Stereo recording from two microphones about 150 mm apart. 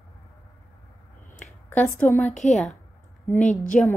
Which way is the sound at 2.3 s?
55° left (ahead or behind).